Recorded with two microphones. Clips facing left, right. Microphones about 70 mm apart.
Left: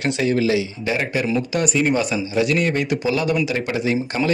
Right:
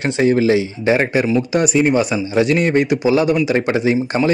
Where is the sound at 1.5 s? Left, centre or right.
Right.